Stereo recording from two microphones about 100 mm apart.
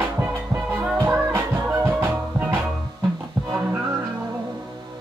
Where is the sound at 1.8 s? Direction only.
25° right (ahead or behind).